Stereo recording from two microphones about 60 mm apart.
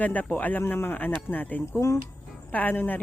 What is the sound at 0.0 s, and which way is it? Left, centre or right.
A woman's voice, left.